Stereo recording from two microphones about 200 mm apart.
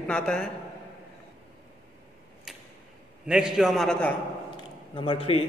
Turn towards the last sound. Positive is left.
turn(degrees=30)  # may be behind; listen again after turning